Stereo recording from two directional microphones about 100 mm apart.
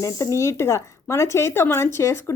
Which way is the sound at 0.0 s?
30° left (ahead or behind).